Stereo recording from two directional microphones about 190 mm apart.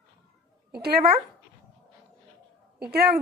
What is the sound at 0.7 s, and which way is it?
Speech, 55° right (ahead or behind).